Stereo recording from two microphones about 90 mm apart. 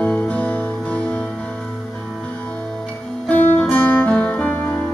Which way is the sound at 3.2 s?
15° left (ahead or behind).